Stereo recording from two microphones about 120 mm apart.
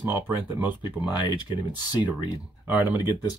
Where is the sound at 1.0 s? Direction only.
40° left (ahead or behind).